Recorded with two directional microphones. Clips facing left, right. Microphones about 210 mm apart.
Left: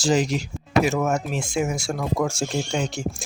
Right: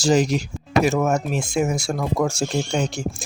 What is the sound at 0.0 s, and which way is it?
Speech, 40° right (ahead or behind).